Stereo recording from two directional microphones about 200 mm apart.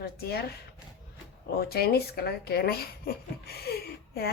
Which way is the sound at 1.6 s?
50° left (ahead or behind).